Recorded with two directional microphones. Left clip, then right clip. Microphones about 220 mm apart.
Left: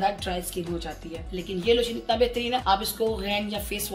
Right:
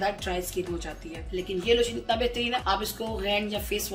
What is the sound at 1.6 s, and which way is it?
Speech, 35° left (ahead or behind).